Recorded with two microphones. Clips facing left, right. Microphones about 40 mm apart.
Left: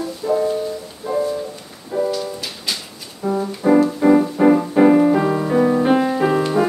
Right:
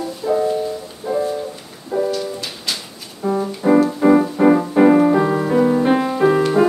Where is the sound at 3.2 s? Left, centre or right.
Centre.